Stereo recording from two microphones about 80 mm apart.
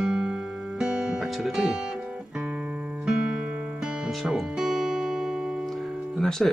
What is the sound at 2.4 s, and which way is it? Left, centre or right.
Music, right.